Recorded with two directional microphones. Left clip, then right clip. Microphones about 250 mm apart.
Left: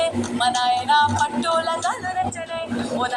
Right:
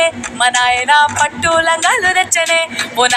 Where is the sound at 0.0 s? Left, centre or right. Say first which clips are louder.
Right 7 dB; right.